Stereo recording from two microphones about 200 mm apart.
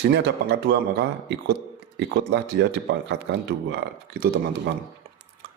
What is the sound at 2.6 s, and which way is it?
A man's voice, 60° right (ahead or behind).